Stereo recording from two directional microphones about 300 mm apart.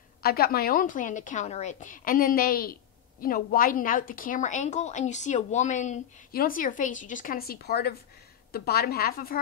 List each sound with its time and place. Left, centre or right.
0.2 s a woman's voice: left